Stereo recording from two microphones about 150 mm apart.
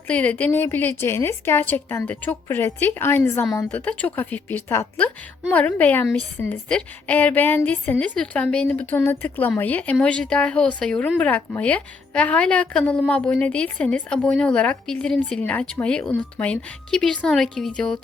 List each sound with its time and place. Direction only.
0.1 s a woman's voice: 10° left (ahead or behind)
3.7 s a woman's voice: 10° left (ahead or behind)